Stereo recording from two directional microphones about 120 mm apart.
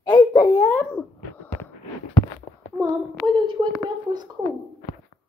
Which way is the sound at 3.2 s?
40° right (ahead or behind).